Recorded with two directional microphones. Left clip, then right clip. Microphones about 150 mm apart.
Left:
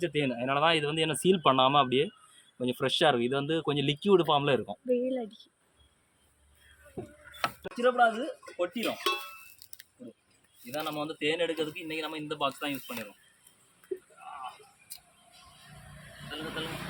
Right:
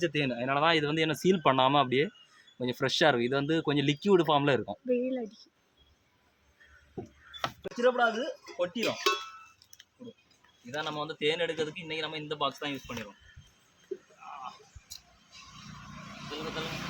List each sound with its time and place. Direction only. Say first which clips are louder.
0.0 s speech: even; 15° right (ahead or behind)
4.9 s speech: left 1 dB; 15° right (ahead or behind)
7.6 s speech: left 1 dB; 15° right (ahead or behind)
10.8 s speech: even; 20° right (ahead or behind)
16.3 s speech: even; 10° right (ahead or behind)